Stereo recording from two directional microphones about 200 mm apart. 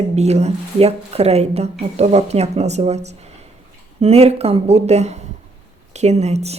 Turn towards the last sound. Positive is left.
turn(degrees=-35)  # may be behind; listen again after turning